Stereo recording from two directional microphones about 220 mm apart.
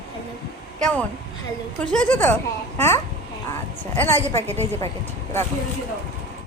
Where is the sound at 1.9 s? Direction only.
5° left (ahead or behind).